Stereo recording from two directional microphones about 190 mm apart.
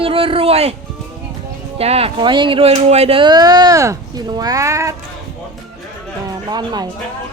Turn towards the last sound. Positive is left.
turn(degrees=-20)  # may be behind; listen again after turning